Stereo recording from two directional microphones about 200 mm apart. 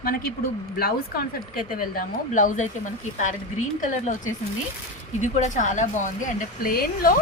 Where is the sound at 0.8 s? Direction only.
50° left (ahead or behind).